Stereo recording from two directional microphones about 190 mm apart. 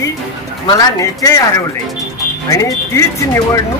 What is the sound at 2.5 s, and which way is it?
Speech, 15° left (ahead or behind).